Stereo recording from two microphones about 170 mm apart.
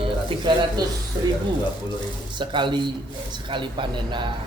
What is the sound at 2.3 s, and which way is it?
Speech, 30° right (ahead or behind).